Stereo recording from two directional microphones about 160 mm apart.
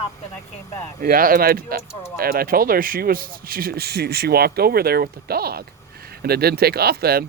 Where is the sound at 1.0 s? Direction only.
65° right (ahead or behind).